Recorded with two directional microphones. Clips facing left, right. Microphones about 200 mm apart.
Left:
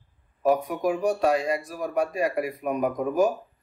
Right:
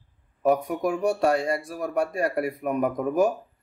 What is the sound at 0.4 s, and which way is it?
Speech, 65° right (ahead or behind).